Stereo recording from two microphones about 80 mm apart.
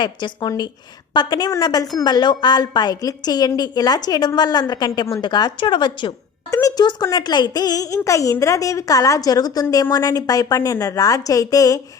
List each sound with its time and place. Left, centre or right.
0.0 s a woman's voice: left
2.0 s a woman's voice: left
6.5 s speech: left
6.7 s a woman's voice: left